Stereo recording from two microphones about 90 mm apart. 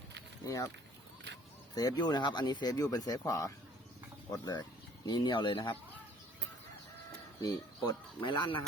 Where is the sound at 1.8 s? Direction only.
50° left (ahead or behind); by 5.8 s 65° left (ahead or behind).